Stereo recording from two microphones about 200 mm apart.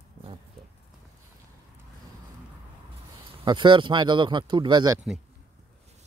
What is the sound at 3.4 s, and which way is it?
Speech, 25° right (ahead or behind).